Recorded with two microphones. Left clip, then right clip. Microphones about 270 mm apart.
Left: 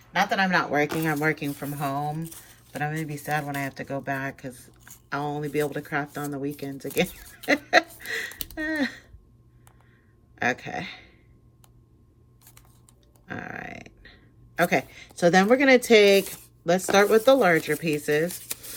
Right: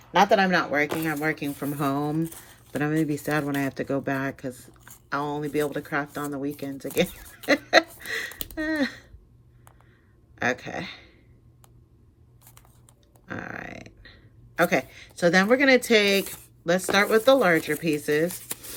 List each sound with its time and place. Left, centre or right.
0.1 s speech: centre
1.5 s speech: centre
10.3 s speech: centre
13.2 s speech: centre